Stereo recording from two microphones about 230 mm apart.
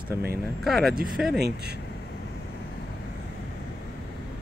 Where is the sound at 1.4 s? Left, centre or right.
Right.